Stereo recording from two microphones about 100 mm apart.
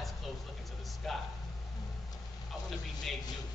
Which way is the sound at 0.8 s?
Centre (ahead or behind).